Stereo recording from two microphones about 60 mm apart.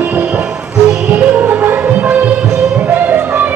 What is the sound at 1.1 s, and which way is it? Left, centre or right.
Music, right.